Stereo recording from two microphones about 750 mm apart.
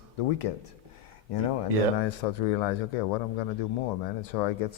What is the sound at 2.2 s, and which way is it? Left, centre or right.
Speech, left.